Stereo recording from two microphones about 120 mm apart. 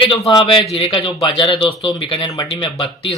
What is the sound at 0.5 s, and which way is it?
A man's voice, 45° left (ahead or behind).